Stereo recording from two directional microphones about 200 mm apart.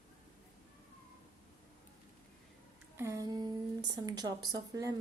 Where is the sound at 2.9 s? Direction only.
15° right (ahead or behind).